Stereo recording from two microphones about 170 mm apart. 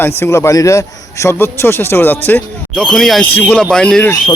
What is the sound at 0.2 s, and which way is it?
A man's voice, 15° left (ahead or behind).